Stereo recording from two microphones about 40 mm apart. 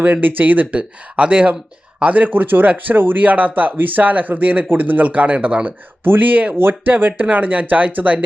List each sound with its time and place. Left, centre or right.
0.0 s speech: right
0.8 s speech: right
3.2 s speech: right
6.6 s speech: right
6.9 s speech: right